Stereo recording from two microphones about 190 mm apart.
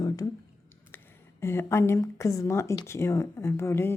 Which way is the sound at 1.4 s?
15° left (ahead or behind).